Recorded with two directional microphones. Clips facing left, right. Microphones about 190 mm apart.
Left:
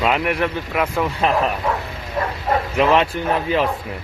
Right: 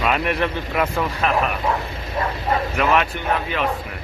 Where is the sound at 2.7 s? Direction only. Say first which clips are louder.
Left 5 dB; 30° left (ahead or behind).